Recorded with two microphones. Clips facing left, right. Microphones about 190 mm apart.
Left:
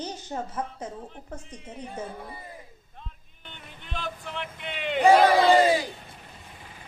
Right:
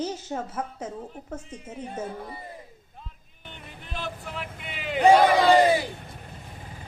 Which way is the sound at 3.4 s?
Centre (ahead or behind).